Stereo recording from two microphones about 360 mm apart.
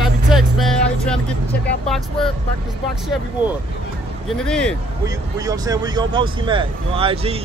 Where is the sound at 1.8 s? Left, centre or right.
Centre.